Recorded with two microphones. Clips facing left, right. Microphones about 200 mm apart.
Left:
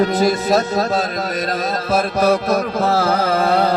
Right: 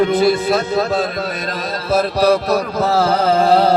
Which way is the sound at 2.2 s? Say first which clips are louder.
Right 1 dB; 50° left (ahead or behind).